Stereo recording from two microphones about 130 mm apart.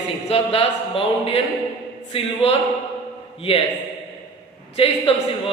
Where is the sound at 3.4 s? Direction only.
45° left (ahead or behind).